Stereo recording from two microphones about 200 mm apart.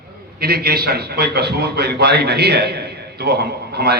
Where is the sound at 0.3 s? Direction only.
50° right (ahead or behind).